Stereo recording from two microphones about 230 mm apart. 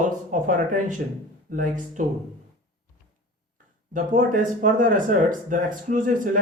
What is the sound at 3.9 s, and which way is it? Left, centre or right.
Speech, right.